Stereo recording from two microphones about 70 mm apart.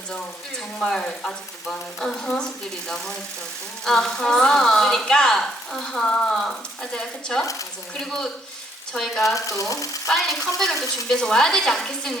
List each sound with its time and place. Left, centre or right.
0.8 s a woman's voice: centre
8.9 s stir: centre
9.2 s frying: left
10.1 s stir: centre
11.1 s a woman's voice: centre